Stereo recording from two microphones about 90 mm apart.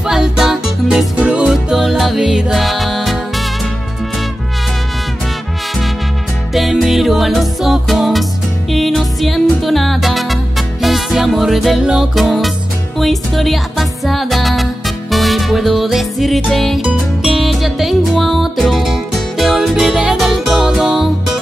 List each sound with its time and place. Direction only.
0.0 s music: 5° right (ahead or behind)
6.5 s music: centre (ahead or behind)